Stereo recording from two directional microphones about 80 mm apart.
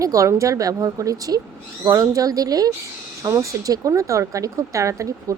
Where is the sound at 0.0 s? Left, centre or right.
Right.